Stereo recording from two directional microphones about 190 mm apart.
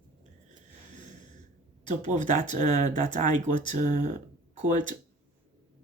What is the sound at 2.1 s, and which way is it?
Speech, 40° right (ahead or behind).